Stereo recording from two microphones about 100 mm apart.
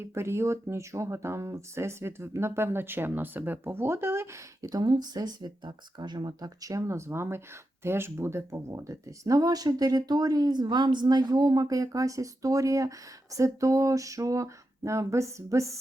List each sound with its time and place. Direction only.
0.0 s speech: 25° right (ahead or behind)